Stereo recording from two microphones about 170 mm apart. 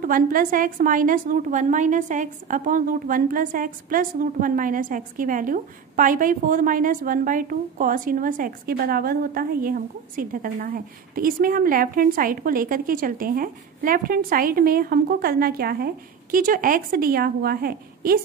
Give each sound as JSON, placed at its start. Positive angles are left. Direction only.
{"t": 0.0, "sound": "a woman's voice", "side_deg": -55}